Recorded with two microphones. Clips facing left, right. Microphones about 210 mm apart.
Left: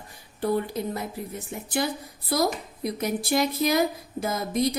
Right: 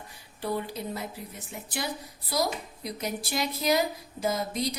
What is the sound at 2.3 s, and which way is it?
A woman's voice, 55° left (ahead or behind).